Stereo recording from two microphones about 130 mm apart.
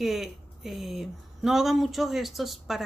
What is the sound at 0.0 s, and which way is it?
Speech, centre (ahead or behind).